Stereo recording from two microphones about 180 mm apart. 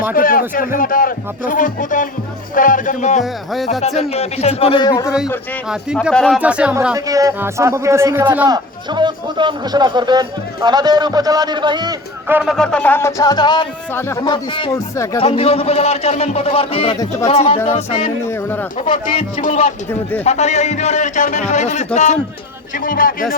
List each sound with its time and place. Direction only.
0.1 s a man's voice: 50° left (ahead or behind); by 5.1 s 20° left (ahead or behind)
5.6 s a man's voice: 5° right (ahead or behind)
6.9 s a man's voice: 20° right (ahead or behind)
12.3 s speech: centre (ahead or behind); by 14.7 s 25° left (ahead or behind)
14.7 s speech: 15° left (ahead or behind)
15.2 s a man's voice: 35° left (ahead or behind)
18.3 s speech: 15° left (ahead or behind)
19.4 s a man's voice: 40° left (ahead or behind)